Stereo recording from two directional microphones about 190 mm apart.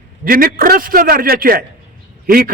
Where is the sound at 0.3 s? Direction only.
50° right (ahead or behind).